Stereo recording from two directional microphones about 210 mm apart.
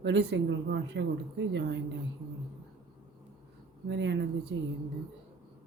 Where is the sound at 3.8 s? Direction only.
55° right (ahead or behind).